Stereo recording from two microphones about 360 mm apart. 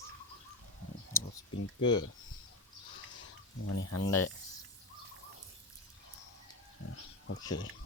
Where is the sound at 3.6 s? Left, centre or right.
Left.